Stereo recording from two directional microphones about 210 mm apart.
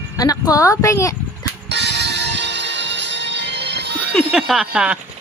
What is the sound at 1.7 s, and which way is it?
Music, 55° right (ahead or behind).